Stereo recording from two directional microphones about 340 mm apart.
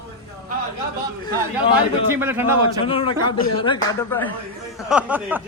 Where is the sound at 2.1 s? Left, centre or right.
Centre.